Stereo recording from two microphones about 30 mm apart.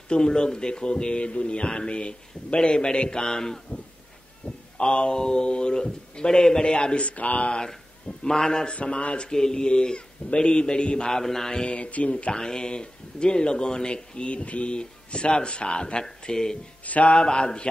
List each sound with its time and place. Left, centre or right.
0.1 s speech: left
4.7 s speech: left
6.6 s speech: left
7.0 s speech: left
8.2 s speech: centre
8.8 s speech: left
9.3 s speech: left
11.1 s music: centre
11.6 s speech: left
12.3 s speech: left
14.3 s speech: left
14.7 s speech: left
16.8 s mantra: left
17.1 s speech: left